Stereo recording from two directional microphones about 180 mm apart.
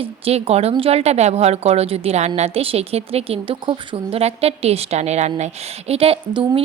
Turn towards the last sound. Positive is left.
turn(degrees=-30)  # may be behind; listen again after turning